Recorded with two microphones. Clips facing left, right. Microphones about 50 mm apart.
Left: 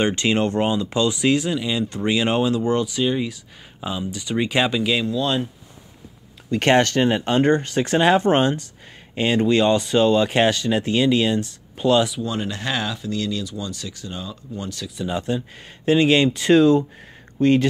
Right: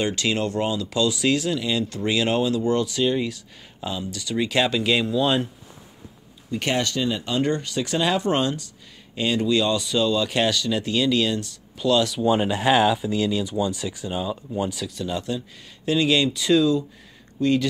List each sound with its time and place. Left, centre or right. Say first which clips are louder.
0.0 s speech: left 4 dB; left
2.9 s speech: even; centre
4.8 s speech: right 1 dB; centre
6.5 s speech: left 7 dB; left
12.2 s speech: right 5 dB; centre
15.0 s speech: left 5 dB; left